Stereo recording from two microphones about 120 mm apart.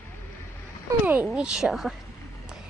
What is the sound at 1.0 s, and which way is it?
Speech, 15° right (ahead or behind).